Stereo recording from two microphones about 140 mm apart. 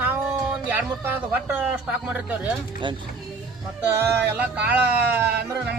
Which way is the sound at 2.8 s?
35° right (ahead or behind).